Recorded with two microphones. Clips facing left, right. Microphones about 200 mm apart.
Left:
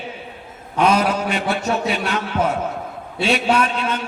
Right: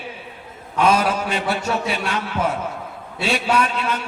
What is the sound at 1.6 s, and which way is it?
A man's voice, 25° left (ahead or behind).